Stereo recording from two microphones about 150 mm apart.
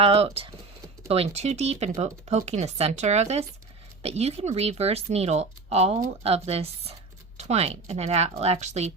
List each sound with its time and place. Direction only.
0.0 s speech: 40° right (ahead or behind)